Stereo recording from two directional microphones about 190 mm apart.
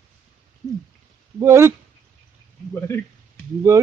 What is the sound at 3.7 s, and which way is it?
Speech, 15° right (ahead or behind).